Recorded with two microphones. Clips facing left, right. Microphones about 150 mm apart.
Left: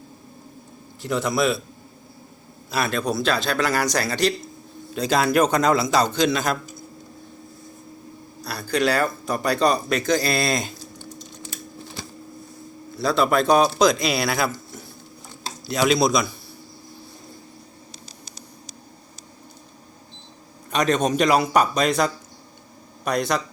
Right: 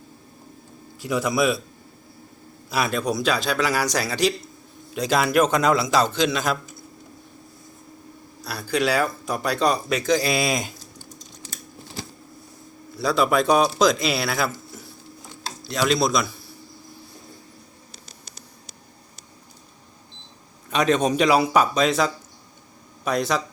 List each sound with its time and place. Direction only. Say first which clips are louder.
1.0 s speech: even; 10° right (ahead or behind)
2.6 s a man's voice: even; 10° right (ahead or behind)
8.4 s speech: left 1 dB; 5° right (ahead or behind)
13.0 s a man's voice: even; 5° right (ahead or behind)
15.6 s a man's voice: left 2 dB; 5° left (ahead or behind)
17.9 s a sound: left 3 dB; 40° left (ahead or behind)
20.7 s a man's voice: right 1 dB; 5° right (ahead or behind)